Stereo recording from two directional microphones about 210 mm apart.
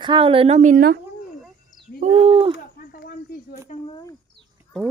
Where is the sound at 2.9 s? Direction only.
45° left (ahead or behind).